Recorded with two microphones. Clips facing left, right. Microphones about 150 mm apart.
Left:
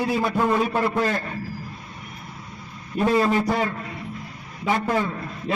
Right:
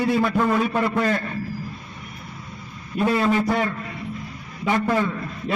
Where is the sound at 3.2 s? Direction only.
10° left (ahead or behind).